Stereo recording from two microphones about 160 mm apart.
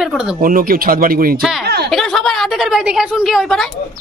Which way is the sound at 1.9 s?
5° left (ahead or behind).